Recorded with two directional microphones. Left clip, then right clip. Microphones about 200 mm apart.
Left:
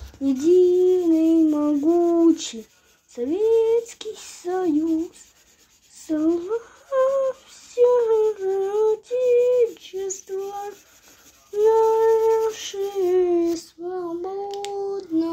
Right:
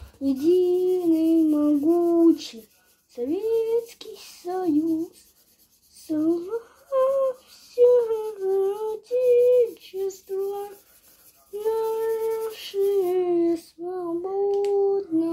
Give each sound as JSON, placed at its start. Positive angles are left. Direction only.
{"t": 0.2, "sound": "a sound", "side_deg": 30}
{"t": 3.2, "sound": "female singing", "side_deg": 30}
{"t": 6.0, "sound": "speech", "side_deg": 30}
{"t": 11.6, "sound": "female singing", "side_deg": 35}